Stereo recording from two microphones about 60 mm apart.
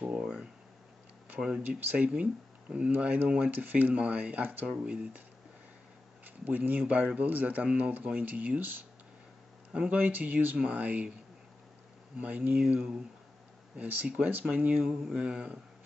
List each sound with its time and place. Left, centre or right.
0.2 s a sound: centre
1.4 s speech: right
6.2 s speech: right
12.2 s speech: right
12.5 s speech: centre